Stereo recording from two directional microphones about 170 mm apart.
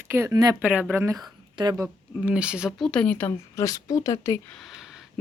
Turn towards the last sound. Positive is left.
turn(degrees=-5)  # may be behind; listen again after turning